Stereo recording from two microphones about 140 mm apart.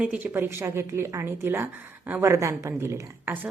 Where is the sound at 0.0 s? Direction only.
10° right (ahead or behind).